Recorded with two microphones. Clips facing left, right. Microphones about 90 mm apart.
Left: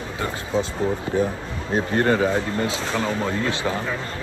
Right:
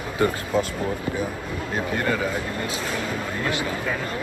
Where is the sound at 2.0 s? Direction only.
40° left (ahead or behind).